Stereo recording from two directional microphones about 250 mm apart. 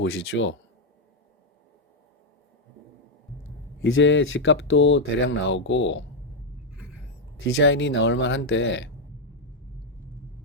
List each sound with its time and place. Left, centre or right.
0.0 s speech: left
3.8 s speech: left
6.7 s a sound: centre
7.4 s speech: left